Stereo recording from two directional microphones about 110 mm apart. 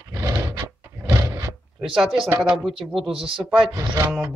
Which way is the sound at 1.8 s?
5° right (ahead or behind).